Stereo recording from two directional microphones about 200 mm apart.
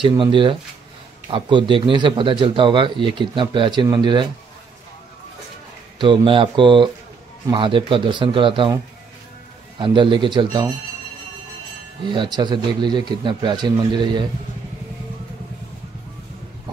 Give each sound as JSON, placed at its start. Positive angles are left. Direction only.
{"t": 0.0, "sound": "speech", "side_deg": -25}
{"t": 5.9, "sound": "speech", "side_deg": -25}
{"t": 9.8, "sound": "speech", "side_deg": -25}
{"t": 12.0, "sound": "speech", "side_deg": -25}